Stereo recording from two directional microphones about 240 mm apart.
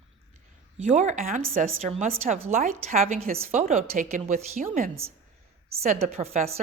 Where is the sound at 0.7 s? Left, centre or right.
Right.